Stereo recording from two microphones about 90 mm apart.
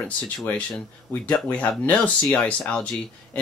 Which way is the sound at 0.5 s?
15° left (ahead or behind).